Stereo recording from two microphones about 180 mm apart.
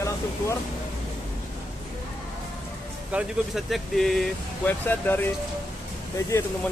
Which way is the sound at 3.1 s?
5° right (ahead or behind).